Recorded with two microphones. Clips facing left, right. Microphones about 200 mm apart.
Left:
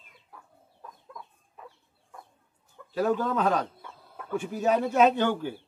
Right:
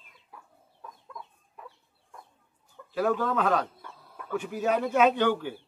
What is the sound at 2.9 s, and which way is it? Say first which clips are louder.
Speech: left 1 dB; 40° left (ahead or behind).